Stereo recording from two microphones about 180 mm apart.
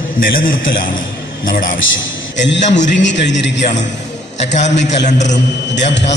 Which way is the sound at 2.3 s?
80° left.